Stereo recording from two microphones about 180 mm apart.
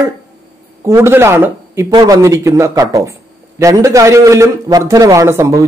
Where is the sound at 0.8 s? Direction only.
15° right (ahead or behind).